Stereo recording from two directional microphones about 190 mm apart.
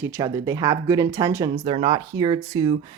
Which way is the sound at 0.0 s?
15° right (ahead or behind).